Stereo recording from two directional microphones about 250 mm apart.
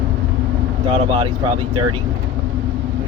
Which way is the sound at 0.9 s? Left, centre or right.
Right.